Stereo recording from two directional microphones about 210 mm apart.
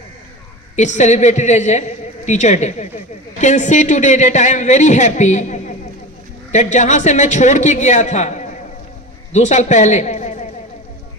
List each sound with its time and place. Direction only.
0.8 s a man's voice: 35° left (ahead or behind)